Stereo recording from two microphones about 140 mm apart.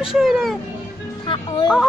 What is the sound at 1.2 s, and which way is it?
Music, 35° left (ahead or behind).